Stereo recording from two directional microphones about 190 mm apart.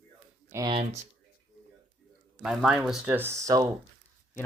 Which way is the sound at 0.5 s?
25° right (ahead or behind).